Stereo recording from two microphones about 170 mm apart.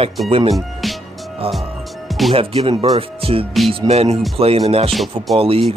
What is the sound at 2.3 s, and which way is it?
Speech, 30° right (ahead or behind).